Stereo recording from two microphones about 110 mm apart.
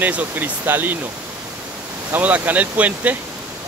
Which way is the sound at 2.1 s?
15° right (ahead or behind).